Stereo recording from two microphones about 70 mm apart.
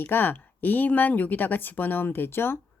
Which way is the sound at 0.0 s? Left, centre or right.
Left.